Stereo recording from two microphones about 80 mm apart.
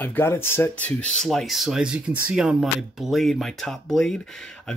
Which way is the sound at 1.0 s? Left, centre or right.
Centre.